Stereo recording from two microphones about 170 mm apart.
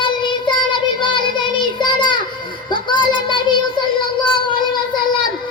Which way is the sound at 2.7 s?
30° left (ahead or behind).